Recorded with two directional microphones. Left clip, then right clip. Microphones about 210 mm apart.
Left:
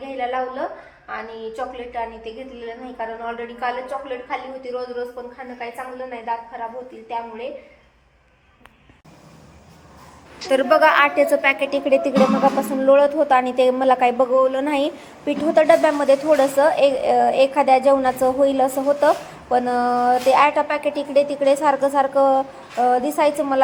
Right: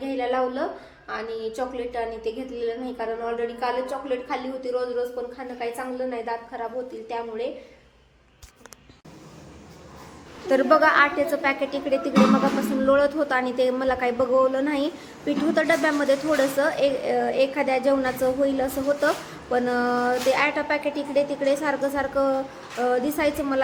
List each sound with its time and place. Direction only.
0.0 s a sound: 10° right (ahead or behind)
1.0 s a woman's voice: 10° right (ahead or behind)
5.5 s a woman's voice: 10° right (ahead or behind)
10.5 s a woman's voice: 15° left (ahead or behind)